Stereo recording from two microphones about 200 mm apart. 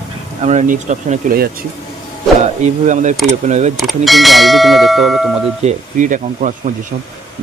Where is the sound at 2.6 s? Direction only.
35° right (ahead or behind).